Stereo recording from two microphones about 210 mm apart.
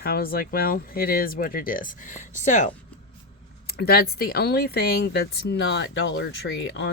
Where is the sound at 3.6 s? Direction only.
45° left (ahead or behind).